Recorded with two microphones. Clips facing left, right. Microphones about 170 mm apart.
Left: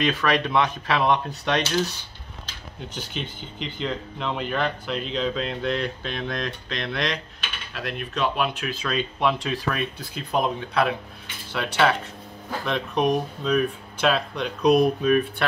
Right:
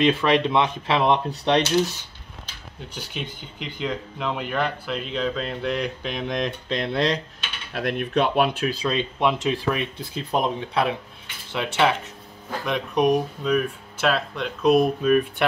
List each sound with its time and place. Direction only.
0.0 s speech: 25° right (ahead or behind)
2.9 s speech: 10° right (ahead or behind); by 7.2 s 30° right (ahead or behind)
7.7 s cutlery: 55° right (ahead or behind)
8.6 s speech: 25° right (ahead or behind); by 15.2 s 5° right (ahead or behind)